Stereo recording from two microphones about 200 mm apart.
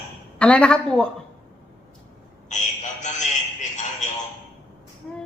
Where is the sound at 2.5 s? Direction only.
35° left (ahead or behind).